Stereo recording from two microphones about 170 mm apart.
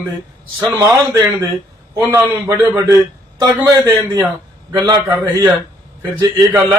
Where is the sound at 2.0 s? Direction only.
10° right (ahead or behind).